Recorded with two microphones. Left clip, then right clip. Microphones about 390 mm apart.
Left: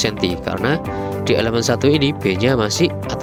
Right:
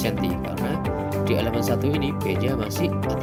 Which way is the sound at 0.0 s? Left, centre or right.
Left.